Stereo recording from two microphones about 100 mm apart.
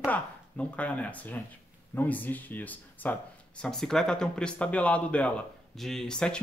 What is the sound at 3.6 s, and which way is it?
Speech, 5° left (ahead or behind).